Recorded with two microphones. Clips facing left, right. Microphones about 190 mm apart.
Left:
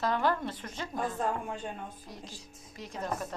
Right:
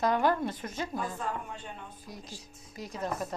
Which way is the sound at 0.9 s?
45° left (ahead or behind).